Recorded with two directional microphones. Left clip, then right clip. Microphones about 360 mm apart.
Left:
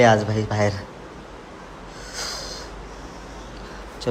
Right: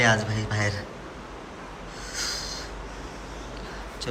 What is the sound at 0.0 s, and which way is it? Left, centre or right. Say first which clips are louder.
Speech: left 6 dB; centre.